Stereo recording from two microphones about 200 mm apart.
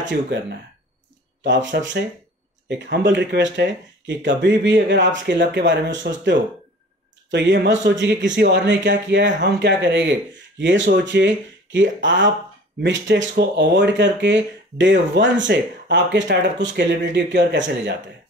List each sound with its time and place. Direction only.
0.3 s speech: 60° right (ahead or behind)